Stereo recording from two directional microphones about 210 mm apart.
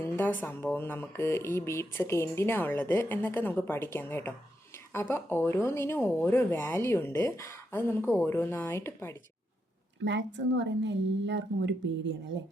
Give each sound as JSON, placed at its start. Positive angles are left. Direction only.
{"t": 0.0, "sound": "speech", "side_deg": 10}
{"t": 10.0, "sound": "a woman's voice", "side_deg": -60}